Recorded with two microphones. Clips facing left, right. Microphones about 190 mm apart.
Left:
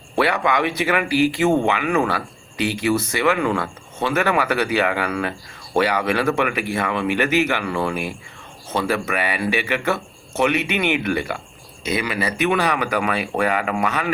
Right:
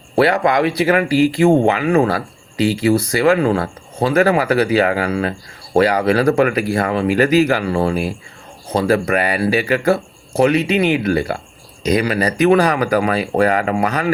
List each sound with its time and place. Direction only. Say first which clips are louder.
0.2 s speech: right 5 dB; 40° right (ahead or behind)